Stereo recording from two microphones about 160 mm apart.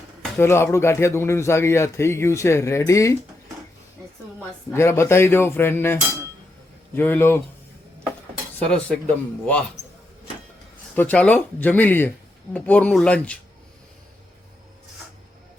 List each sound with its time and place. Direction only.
0.3 s speech: 15° left (ahead or behind)
4.7 s speech: 15° left (ahead or behind)
8.5 s speech: 10° left (ahead or behind)
10.9 s speech: 10° left (ahead or behind)